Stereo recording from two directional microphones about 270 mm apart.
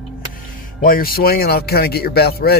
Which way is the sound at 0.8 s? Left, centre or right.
Left.